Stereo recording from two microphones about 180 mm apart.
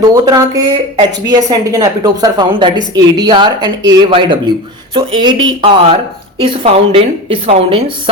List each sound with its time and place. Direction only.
0.1 s a woman's voice: 20° right (ahead or behind)